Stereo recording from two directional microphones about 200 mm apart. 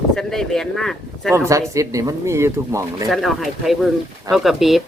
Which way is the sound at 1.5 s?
15° right (ahead or behind).